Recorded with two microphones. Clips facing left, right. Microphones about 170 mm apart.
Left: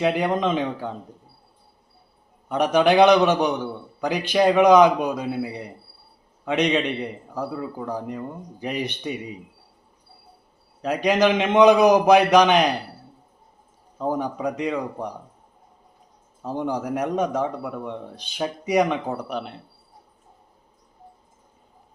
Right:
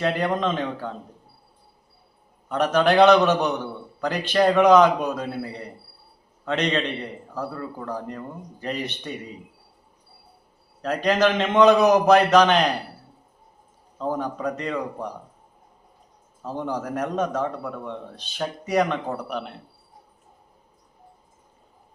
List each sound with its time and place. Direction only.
0.0 s a man's voice: 10° left (ahead or behind)
2.5 s a man's voice: 15° left (ahead or behind)
10.8 s a man's voice: 10° left (ahead or behind)
14.0 s a man's voice: 15° left (ahead or behind)
16.4 s a man's voice: 15° left (ahead or behind)